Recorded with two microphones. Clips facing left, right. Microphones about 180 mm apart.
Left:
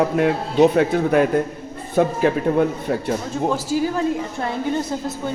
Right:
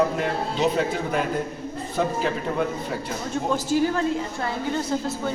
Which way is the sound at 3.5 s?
5° left (ahead or behind).